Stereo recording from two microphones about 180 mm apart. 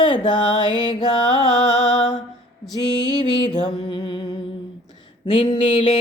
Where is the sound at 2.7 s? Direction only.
20° left (ahead or behind).